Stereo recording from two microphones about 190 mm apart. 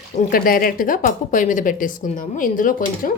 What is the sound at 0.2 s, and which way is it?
Speech, 50° left (ahead or behind).